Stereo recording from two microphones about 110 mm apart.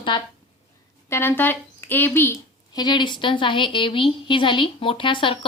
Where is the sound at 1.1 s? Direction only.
20° left (ahead or behind).